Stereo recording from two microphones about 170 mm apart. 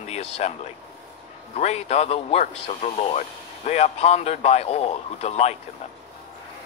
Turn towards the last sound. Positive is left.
turn(degrees=40)  # may be behind; listen again after turning